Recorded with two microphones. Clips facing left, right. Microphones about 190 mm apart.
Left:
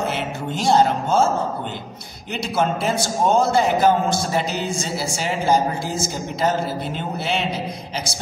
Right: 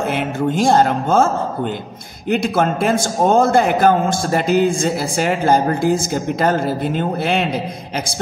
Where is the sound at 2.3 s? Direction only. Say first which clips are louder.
Right 5 dB; 55° right (ahead or behind).